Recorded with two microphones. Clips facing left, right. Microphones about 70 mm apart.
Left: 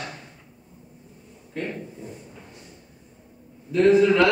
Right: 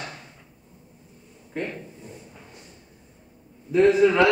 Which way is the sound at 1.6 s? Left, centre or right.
Centre.